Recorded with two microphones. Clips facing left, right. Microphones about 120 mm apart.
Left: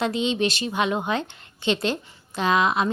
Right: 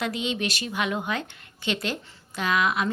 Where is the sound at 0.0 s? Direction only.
30° left (ahead or behind).